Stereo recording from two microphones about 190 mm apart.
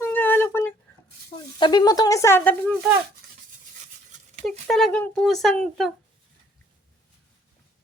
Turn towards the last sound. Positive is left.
turn(degrees=0)  # may be behind; listen again after turning